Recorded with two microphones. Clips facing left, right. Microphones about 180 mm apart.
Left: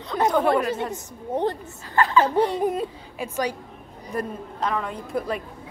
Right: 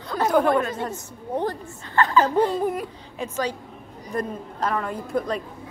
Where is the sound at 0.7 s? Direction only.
20° left (ahead or behind).